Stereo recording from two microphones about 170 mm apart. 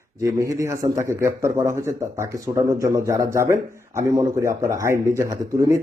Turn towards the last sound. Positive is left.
turn(degrees=-20)  # may be behind; listen again after turning